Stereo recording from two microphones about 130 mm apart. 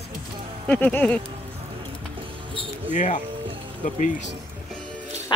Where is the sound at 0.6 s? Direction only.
10° left (ahead or behind).